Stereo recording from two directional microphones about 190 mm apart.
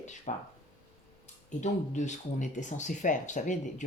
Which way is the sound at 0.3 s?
40° left (ahead or behind).